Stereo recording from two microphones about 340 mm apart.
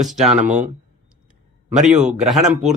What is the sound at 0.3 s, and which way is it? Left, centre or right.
Speech, right.